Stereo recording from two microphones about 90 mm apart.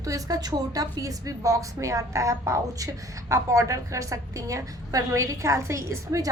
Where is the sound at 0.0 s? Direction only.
40° right (ahead or behind).